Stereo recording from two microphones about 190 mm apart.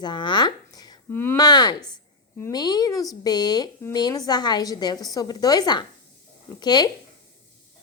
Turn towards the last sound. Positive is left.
turn(degrees=20)  # may be behind; listen again after turning